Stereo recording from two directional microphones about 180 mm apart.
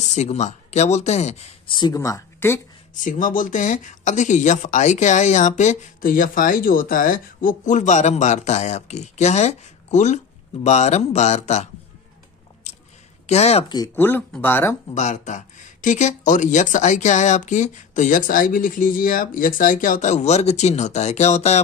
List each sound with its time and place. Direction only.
0.0 s speech: 40° left (ahead or behind)
1.8 s speech: 20° left (ahead or behind)
3.0 s speech: 45° left (ahead or behind)
12.7 s a sound: 40° left (ahead or behind)
13.3 s speech: 35° left (ahead or behind)
13.9 s speech: 10° left (ahead or behind)
15.0 s speech: 40° left (ahead or behind)